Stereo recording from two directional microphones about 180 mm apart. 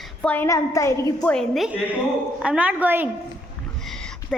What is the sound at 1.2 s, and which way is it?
A woman's voice, 5° left (ahead or behind).